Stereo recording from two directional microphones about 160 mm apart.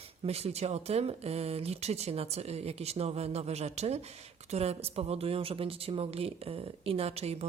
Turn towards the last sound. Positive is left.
turn(degrees=-40)  # may be behind; listen again after turning